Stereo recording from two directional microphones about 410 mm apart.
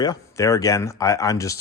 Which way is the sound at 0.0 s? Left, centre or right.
Centre.